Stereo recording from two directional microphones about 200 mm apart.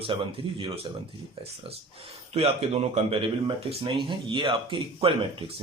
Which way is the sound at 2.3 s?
30° right (ahead or behind).